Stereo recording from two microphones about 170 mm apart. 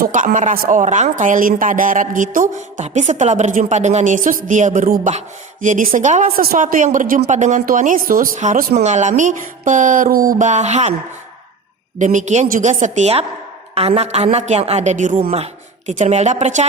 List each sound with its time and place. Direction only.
0.0 s speech: 55° right (ahead or behind)
11.9 s a woman's voice: 45° right (ahead or behind)